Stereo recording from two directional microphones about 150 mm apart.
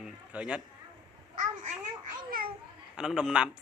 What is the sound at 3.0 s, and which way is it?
Speech, 5° right (ahead or behind).